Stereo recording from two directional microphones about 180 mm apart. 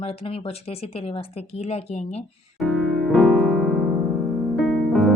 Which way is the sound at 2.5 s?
Centre (ahead or behind).